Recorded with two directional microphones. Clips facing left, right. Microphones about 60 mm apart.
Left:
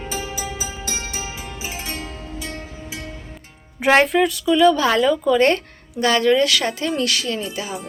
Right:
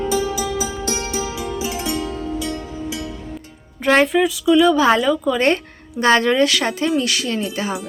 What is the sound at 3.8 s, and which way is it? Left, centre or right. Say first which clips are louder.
Music: even; centre.